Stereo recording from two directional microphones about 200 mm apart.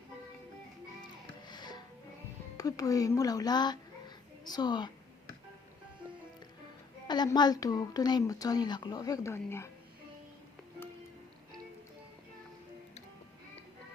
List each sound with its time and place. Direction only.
1.5 s music: 20° left (ahead or behind)
2.6 s a woman's voice: 15° left (ahead or behind)
7.1 s a woman's voice: 20° left (ahead or behind)